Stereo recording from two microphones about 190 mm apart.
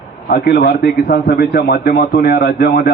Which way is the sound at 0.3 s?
50° left (ahead or behind).